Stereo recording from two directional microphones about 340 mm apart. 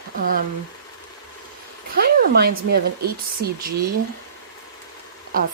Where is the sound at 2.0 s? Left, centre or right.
Right.